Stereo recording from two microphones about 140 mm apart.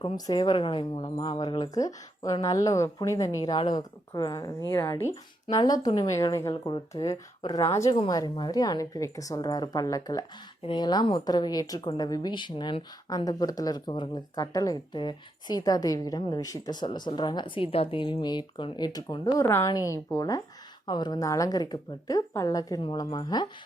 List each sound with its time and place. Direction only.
0.0 s speech: 30° left (ahead or behind)
22.8 s speech: 35° left (ahead or behind)